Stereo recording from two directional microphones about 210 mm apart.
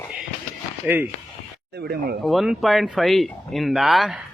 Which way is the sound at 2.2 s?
Centre (ahead or behind).